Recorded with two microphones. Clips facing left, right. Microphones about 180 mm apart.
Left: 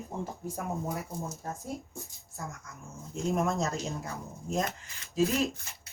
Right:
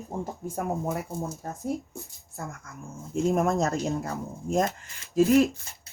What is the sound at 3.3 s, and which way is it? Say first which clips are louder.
Speech: right 2 dB; 55° right (ahead or behind).